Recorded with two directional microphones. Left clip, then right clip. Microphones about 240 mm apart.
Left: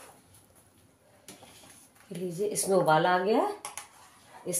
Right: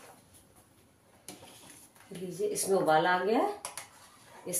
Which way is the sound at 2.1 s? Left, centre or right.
Left.